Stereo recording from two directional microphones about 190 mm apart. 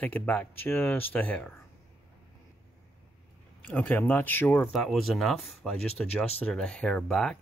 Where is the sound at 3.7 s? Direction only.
10° left (ahead or behind).